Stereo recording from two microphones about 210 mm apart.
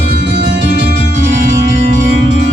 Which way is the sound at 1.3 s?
35° right (ahead or behind).